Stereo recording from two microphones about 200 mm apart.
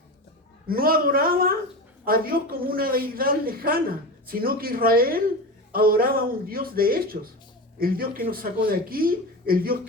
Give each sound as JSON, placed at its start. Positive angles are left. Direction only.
{"t": 0.7, "sound": "speech", "side_deg": -45}